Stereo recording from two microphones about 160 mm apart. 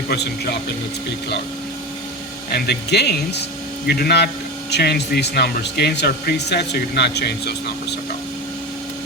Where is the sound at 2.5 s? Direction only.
90° left.